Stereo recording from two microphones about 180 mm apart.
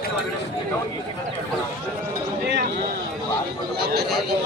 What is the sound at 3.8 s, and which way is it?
Speech, 65° right (ahead or behind).